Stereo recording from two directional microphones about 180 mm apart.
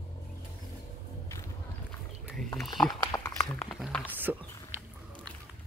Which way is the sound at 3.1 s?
20° left (ahead or behind).